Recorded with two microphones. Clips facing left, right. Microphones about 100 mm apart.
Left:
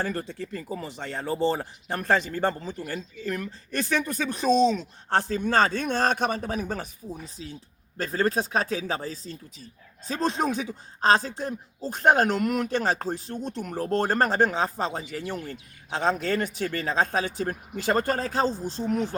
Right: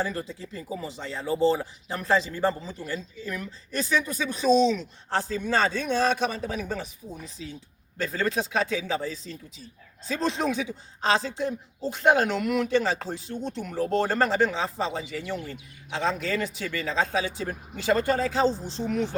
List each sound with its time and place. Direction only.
0.0 s speech: 50° left (ahead or behind)
7.4 s speech: 35° left (ahead or behind)